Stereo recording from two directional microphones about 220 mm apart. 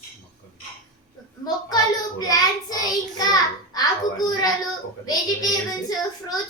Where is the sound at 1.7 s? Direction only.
15° left (ahead or behind).